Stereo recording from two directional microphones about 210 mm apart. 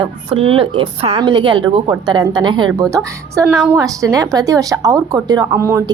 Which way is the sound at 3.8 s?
15° right (ahead or behind).